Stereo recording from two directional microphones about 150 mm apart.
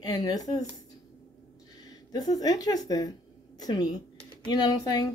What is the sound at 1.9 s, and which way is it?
A woman's voice, 25° left (ahead or behind).